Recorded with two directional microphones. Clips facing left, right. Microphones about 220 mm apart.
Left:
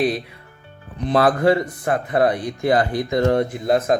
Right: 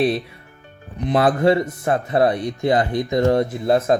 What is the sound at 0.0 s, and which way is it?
Speech, 25° right (ahead or behind).